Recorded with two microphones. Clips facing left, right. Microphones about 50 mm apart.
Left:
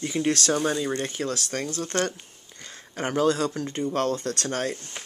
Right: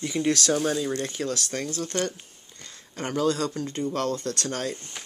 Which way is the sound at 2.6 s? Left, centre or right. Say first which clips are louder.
Left 3 dB; left.